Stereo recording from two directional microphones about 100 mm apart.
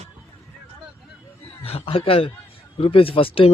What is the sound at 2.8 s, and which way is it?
Speech, 65° left (ahead or behind).